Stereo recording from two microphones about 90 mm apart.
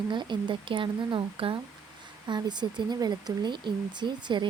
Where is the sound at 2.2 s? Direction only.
55° right (ahead or behind).